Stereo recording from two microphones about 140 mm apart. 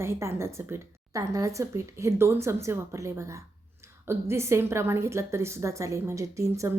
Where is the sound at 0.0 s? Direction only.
20° right (ahead or behind).